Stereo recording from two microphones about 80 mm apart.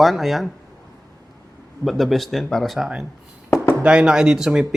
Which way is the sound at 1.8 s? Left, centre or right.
Centre.